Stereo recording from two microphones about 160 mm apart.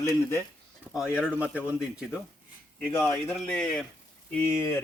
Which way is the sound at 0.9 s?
5° right (ahead or behind).